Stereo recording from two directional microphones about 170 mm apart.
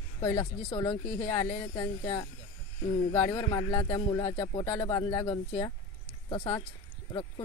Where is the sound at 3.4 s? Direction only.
30° left (ahead or behind).